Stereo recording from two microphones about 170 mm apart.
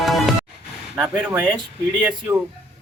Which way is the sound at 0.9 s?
5° right (ahead or behind).